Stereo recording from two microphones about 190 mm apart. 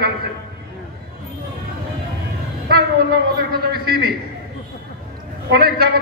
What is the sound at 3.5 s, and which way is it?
Speech, 55° right (ahead or behind).